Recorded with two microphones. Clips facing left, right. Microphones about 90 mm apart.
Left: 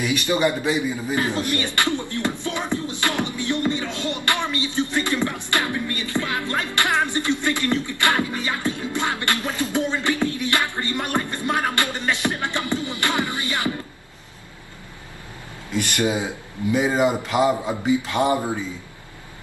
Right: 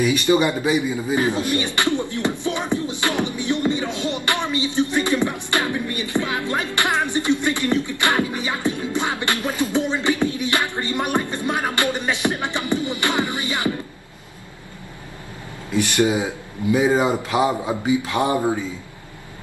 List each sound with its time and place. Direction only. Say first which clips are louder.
0.0 s a man's voice: right 3 dB; 15° right (ahead or behind)
2.9 s music: right 2 dB; 15° right (ahead or behind)
16.0 s a man's voice: right 3 dB; 20° right (ahead or behind)